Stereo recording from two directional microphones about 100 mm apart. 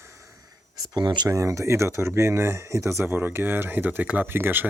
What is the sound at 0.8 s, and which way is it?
Speech, 45° right (ahead or behind).